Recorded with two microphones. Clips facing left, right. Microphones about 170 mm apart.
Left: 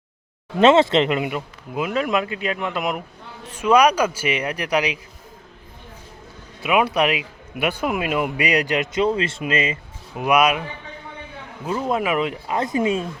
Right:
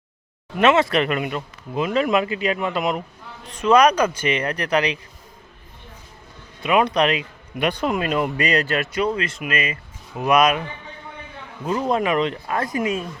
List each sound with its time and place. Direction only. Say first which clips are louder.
0.5 s speech: left 3 dB; 25° left (ahead or behind); by 4.9 s 10° left (ahead or behind)
6.6 s speech: right 1 dB; 5° left (ahead or behind); by 9.7 s 25° left (ahead or behind)
10.2 s speech: right 1 dB; 10° left (ahead or behind)
11.6 s speech: right 1 dB; 5° left (ahead or behind)
12.5 s speech: left 2 dB; 20° left (ahead or behind)